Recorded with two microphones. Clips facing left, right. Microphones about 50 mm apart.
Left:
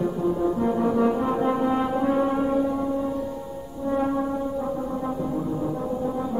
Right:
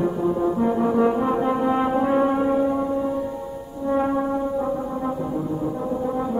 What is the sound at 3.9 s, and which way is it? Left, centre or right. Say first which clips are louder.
Brass instrument: right 3 dB; centre.